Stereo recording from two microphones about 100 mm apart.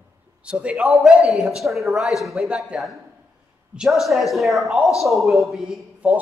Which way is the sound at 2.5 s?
10° right (ahead or behind).